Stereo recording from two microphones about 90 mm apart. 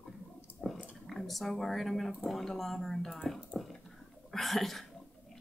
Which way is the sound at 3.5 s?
Centre (ahead or behind).